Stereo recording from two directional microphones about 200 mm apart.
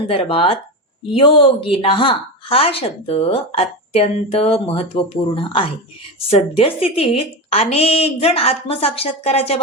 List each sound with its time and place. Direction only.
0.1 s a woman's voice: 30° left (ahead or behind)